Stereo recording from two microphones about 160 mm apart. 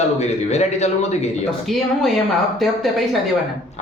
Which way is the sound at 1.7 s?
Centre (ahead or behind).